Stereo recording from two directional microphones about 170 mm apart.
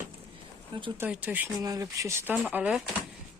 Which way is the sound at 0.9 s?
10° right (ahead or behind).